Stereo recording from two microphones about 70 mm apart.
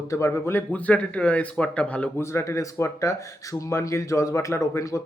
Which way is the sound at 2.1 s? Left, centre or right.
Left.